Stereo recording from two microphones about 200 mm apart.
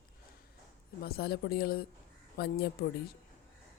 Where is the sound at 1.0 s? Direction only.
50° left (ahead or behind).